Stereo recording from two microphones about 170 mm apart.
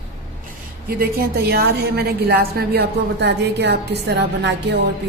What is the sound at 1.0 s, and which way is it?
A woman's voice, 65° right (ahead or behind).